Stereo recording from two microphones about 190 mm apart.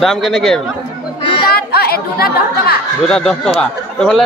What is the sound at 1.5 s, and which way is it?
Speech, 55° left (ahead or behind).